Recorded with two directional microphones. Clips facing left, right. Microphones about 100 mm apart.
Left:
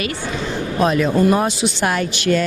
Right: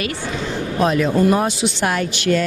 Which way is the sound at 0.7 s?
25° left (ahead or behind).